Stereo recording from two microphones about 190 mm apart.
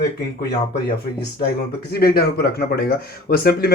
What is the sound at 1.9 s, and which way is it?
Speech, 55° left (ahead or behind).